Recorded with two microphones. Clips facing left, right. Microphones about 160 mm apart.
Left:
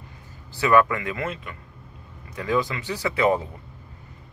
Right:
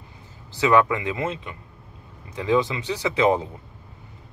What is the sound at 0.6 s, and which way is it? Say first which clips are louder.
Speech: even; 20° right (ahead or behind).